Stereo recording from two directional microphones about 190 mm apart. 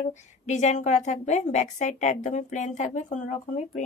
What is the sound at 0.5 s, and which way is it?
Speech, 40° left (ahead or behind).